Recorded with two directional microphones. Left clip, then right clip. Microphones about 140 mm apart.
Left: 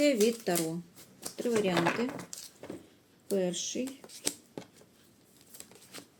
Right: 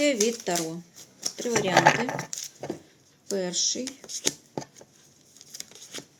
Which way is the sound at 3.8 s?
25° right (ahead or behind).